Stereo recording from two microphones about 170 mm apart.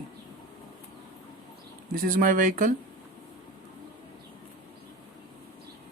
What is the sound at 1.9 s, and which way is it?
Speech, 55° right (ahead or behind).